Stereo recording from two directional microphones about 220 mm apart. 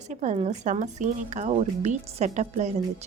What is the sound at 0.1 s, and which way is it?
Speech, 30° right (ahead or behind).